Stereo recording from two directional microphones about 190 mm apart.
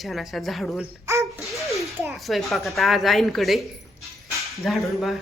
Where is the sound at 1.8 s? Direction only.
Centre (ahead or behind).